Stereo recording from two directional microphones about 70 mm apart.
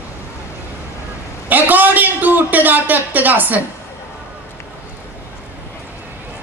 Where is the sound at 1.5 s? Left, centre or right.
Right.